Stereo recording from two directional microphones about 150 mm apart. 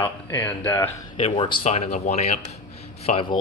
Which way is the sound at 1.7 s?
50° left (ahead or behind).